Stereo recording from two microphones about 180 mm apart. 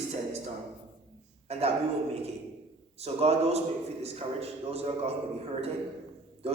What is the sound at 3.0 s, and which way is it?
A man's voice, 35° right (ahead or behind).